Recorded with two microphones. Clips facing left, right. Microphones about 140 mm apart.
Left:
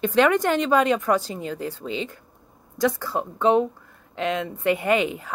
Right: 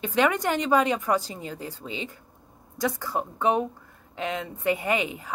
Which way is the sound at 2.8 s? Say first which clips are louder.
Left 4 dB; 15° right (ahead or behind).